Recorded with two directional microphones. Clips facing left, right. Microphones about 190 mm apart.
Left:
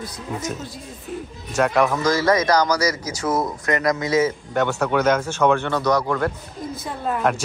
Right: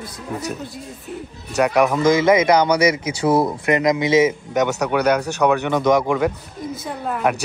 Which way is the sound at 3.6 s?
20° right (ahead or behind).